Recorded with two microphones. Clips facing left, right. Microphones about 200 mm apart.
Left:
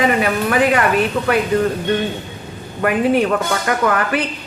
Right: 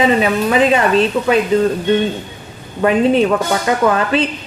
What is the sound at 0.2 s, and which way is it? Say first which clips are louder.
Speech: right 3 dB; 20° right (ahead or behind).